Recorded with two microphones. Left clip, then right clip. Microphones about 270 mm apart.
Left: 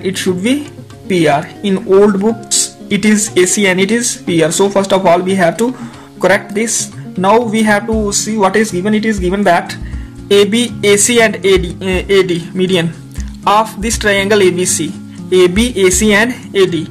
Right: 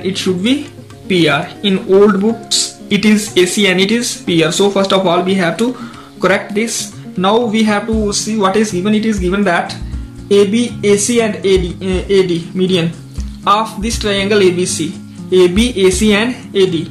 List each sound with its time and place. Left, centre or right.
0.0 s a man's voice: left